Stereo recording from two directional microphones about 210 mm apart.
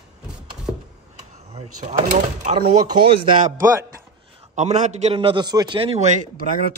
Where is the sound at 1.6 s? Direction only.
35° right (ahead or behind).